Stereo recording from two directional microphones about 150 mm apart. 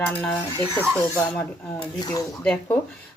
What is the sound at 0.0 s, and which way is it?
Speech, 10° left (ahead or behind).